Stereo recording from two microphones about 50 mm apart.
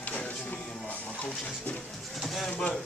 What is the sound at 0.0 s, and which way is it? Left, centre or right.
Music, left.